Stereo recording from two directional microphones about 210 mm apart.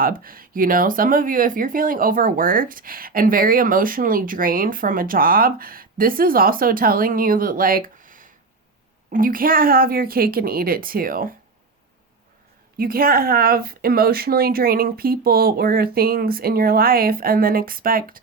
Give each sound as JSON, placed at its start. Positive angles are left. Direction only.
{"t": 0.0, "sound": "speech", "side_deg": -45}
{"t": 12.7, "sound": "speech", "side_deg": -45}